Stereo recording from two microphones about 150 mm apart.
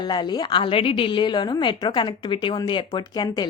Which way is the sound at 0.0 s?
30° left (ahead or behind).